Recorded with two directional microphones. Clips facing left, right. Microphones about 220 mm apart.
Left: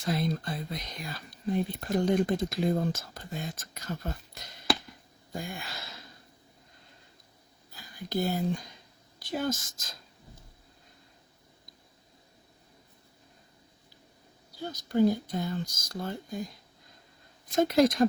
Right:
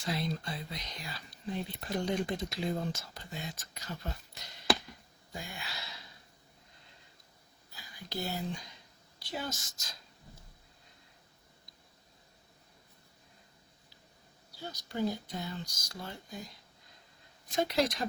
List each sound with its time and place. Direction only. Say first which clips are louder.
0.0 s speech: left 5 dB; 50° left (ahead or behind)
7.7 s a sound: left 9 dB; 50° left (ahead or behind)
9.6 s speech: left 2 dB; 50° left (ahead or behind)
14.5 s speech: left 10 dB; 50° left (ahead or behind)
17.5 s speech: left 7 dB; 50° left (ahead or behind)